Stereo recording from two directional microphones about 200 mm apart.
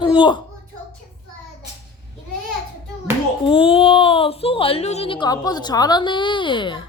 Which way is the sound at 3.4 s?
25° left (ahead or behind).